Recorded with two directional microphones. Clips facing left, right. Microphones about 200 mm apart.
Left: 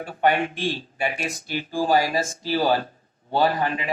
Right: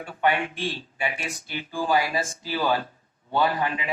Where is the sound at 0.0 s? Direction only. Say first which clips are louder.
Left 3 dB; 40° left (ahead or behind).